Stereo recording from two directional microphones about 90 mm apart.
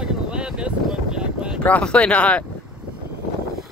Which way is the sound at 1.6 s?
15° left (ahead or behind).